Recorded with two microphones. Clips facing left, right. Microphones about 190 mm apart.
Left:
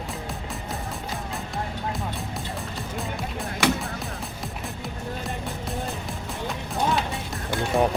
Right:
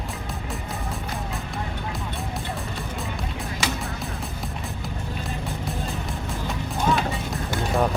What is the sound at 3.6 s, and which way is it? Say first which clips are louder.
Music: left 6 dB; 60° left (ahead or behind).